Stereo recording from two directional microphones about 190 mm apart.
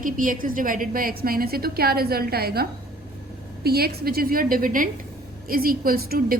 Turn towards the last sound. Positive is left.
turn(degrees=-50)  # may be behind; listen again after turning